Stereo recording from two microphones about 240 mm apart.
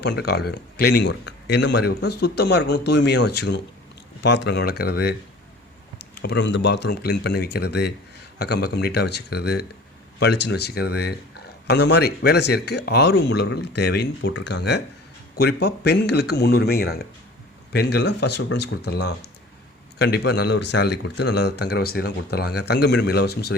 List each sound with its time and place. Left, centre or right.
0.0 s speech: left
6.1 s speech: left